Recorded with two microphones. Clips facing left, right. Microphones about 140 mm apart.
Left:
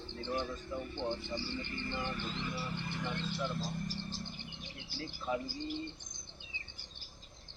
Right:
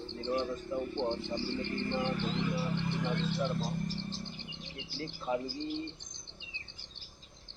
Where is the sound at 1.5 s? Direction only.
65° right (ahead or behind); by 2.5 s 85° right.